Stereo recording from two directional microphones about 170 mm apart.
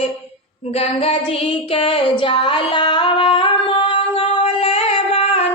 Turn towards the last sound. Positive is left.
turn(degrees=35)  # may be behind; listen again after turning